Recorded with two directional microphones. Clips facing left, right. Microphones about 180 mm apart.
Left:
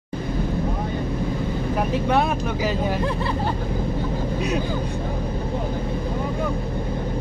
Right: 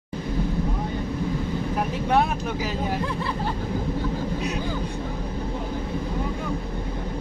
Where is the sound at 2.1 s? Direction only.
75° left (ahead or behind).